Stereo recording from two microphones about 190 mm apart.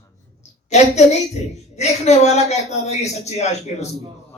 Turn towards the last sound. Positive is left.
turn(degrees=35)  # may be behind; listen again after turning